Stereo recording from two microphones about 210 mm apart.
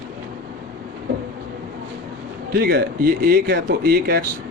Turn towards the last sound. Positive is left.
turn(degrees=-45)  # may be behind; listen again after turning